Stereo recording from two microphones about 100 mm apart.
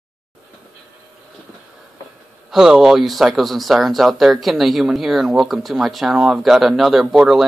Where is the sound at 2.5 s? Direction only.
5° right (ahead or behind).